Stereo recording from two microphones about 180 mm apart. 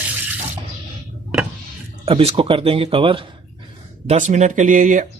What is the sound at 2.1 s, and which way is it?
Speech, 30° right (ahead or behind).